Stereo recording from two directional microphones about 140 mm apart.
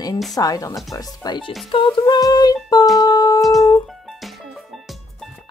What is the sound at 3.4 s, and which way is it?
Music, centre (ahead or behind).